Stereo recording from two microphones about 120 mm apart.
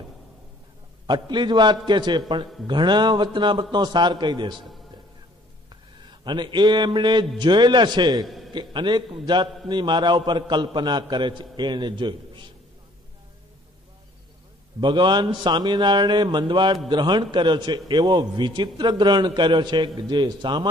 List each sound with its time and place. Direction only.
1.0 s a man's voice: 40° right (ahead or behind)
6.2 s a man's voice: 40° right (ahead or behind)
14.8 s a man's voice: 40° right (ahead or behind)